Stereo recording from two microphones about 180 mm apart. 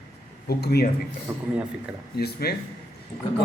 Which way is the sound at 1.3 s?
15° right (ahead or behind).